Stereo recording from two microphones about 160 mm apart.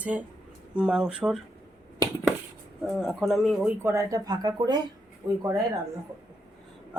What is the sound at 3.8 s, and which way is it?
Speech, 15° right (ahead or behind).